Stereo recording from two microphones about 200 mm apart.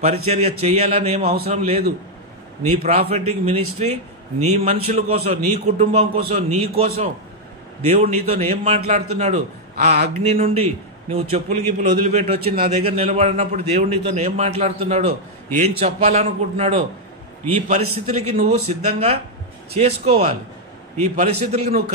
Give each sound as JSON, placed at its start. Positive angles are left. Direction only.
{"t": 0.0, "sound": "a man's voice", "side_deg": -30}